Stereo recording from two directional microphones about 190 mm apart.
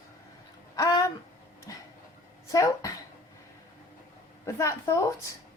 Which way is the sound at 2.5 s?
15° left (ahead or behind).